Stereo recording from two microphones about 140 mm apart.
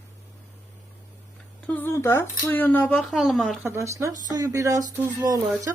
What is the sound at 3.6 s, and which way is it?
Speech, 20° right (ahead or behind).